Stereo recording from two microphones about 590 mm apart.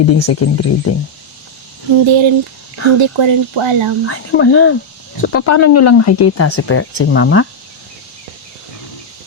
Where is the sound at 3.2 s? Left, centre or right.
Right.